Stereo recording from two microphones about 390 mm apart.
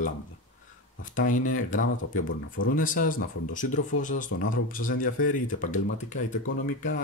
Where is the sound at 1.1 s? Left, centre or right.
Left.